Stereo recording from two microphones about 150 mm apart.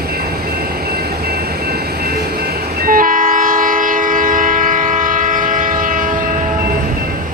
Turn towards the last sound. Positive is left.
turn(degrees=-65)  # may be behind; listen again after turning